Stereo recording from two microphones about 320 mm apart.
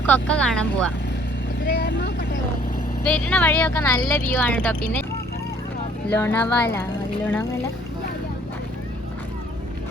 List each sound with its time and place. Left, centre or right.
0.0 s speech: centre
1.6 s vehicle: left
3.0 s speech: centre
6.1 s speech: centre